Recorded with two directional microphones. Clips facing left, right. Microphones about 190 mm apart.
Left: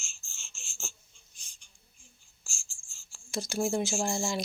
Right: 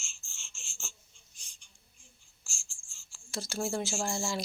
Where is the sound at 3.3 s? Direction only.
15° left (ahead or behind).